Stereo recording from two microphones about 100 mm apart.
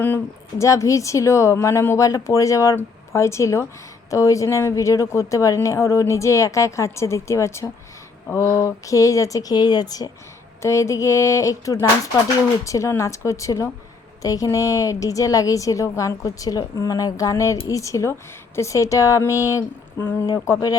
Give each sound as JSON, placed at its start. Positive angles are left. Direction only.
{"t": 0.6, "sound": "a woman's voice", "side_deg": 30}
{"t": 10.6, "sound": "a woman's voice", "side_deg": 30}
{"t": 20.0, "sound": "speech", "side_deg": 20}
{"t": 20.2, "sound": "a woman's voice", "side_deg": 40}